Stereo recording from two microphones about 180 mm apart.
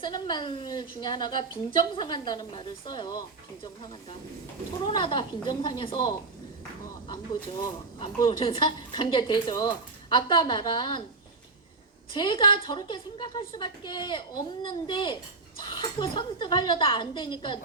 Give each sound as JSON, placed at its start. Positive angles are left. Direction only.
{"t": 0.0, "sound": "a woman's voice", "side_deg": 25}
{"t": 4.9, "sound": "a woman's voice", "side_deg": 25}
{"t": 7.9, "sound": "a woman's voice", "side_deg": 25}
{"t": 12.1, "sound": "a woman's voice", "side_deg": 25}